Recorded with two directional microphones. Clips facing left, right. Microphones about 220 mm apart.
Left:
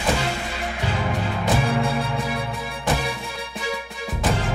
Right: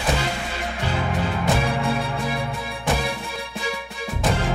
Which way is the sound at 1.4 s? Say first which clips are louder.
Left 3 dB; centre (ahead or behind).